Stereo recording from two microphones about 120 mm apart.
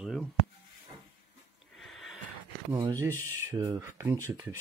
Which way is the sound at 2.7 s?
40° right (ahead or behind).